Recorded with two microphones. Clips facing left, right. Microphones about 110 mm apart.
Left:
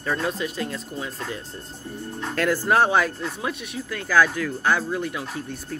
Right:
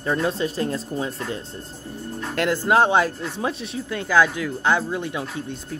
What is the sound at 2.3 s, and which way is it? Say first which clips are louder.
Speech: right 1 dB; 20° right (ahead or behind).